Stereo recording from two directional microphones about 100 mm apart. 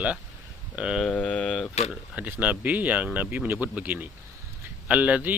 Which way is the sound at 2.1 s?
15° right (ahead or behind).